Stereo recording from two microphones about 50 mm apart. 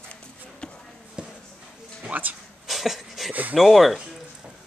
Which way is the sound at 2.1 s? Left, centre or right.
Right.